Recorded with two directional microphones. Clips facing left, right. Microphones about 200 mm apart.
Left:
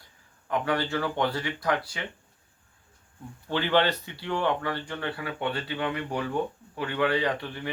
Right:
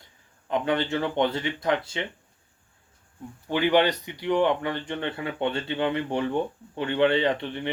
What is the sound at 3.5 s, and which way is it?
Speech, 15° right (ahead or behind).